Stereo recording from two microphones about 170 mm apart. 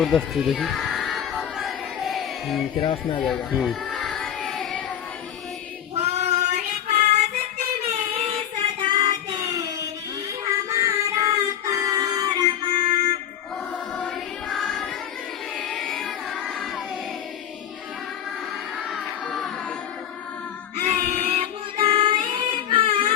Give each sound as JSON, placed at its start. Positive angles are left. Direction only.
{"t": 0.0, "sound": "a sound", "side_deg": 0}
{"t": 2.8, "sound": "speech", "side_deg": 30}
{"t": 3.2, "sound": "a sound", "side_deg": 0}
{"t": 5.9, "sound": "child singing", "side_deg": -40}
{"t": 7.9, "sound": "child singing", "side_deg": -30}
{"t": 10.4, "sound": "music", "side_deg": -20}
{"t": 14.5, "sound": "music", "side_deg": 5}
{"t": 15.5, "sound": "child singing", "side_deg": 0}
{"t": 18.9, "sound": "music", "side_deg": 0}
{"t": 20.8, "sound": "child singing", "side_deg": -45}
{"t": 22.3, "sound": "a sound", "side_deg": -30}